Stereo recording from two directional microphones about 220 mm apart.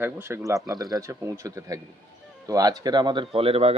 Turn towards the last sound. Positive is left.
turn(degrees=-25)  # may be behind; listen again after turning